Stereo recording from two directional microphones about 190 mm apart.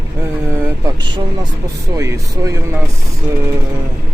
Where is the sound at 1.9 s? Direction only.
15° right (ahead or behind).